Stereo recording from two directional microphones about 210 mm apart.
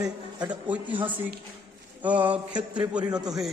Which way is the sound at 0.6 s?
5° right (ahead or behind).